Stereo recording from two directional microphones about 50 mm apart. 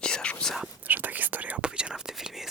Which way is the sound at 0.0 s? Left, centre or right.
Centre.